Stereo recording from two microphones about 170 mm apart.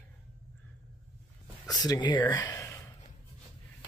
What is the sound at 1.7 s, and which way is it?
Speech, 25° left (ahead or behind).